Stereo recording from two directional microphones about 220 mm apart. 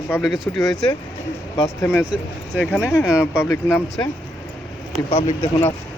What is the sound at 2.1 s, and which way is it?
Speech, 5° right (ahead or behind).